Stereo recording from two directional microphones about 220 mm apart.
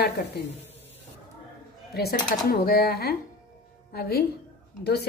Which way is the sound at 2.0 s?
45° left (ahead or behind).